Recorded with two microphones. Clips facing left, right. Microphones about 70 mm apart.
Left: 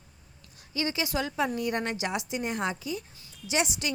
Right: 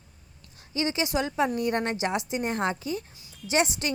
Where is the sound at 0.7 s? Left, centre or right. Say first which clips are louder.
Right 3 dB; right.